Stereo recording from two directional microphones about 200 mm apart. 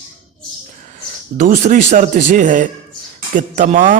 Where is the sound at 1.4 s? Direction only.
40° right (ahead or behind).